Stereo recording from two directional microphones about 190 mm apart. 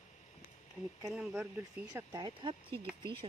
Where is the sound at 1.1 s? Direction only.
5° right (ahead or behind).